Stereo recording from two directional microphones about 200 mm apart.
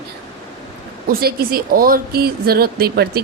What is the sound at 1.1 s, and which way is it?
Speech, 50° right (ahead or behind).